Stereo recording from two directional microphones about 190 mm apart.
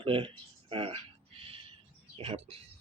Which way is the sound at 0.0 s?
30° right (ahead or behind).